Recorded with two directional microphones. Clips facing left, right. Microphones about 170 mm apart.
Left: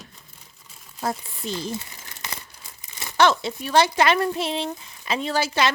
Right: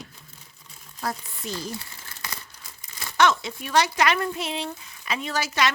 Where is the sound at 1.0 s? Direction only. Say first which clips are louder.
Left 3 dB; 25° left (ahead or behind).